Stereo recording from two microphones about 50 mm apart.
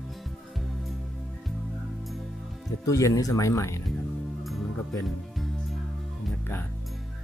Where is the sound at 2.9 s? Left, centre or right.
Left.